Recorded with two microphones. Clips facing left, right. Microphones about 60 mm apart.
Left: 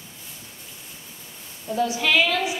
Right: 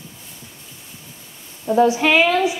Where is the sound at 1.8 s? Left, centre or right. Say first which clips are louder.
Right 6 dB; right.